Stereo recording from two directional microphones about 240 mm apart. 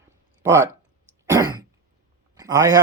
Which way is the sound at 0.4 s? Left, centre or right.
Centre.